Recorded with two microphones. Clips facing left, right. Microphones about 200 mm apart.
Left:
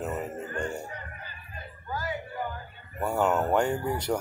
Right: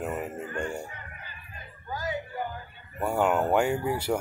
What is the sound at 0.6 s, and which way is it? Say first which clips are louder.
Music: even; 25° right (ahead or behind).